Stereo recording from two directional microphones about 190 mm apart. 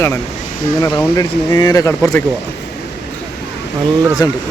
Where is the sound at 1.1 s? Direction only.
20° left (ahead or behind).